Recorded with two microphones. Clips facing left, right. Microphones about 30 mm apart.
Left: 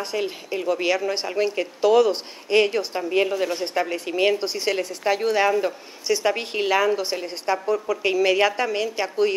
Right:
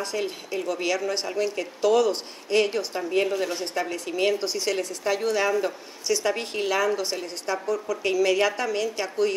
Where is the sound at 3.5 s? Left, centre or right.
Left.